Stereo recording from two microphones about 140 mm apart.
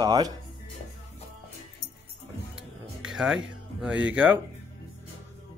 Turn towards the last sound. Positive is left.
turn(degrees=-10)  # may be behind; listen again after turning